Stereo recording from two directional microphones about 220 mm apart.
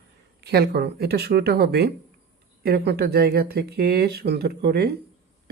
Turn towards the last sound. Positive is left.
turn(degrees=-45)  # may be behind; listen again after turning